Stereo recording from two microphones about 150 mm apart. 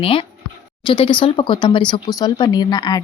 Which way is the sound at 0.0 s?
35° left (ahead or behind).